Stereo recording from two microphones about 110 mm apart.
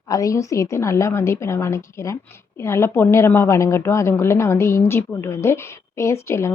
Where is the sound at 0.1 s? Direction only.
30° left (ahead or behind).